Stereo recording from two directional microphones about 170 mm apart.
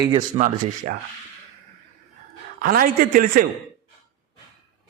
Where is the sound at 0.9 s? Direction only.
50° right (ahead or behind).